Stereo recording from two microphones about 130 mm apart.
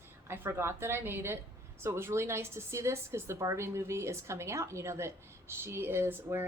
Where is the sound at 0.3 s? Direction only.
20° right (ahead or behind).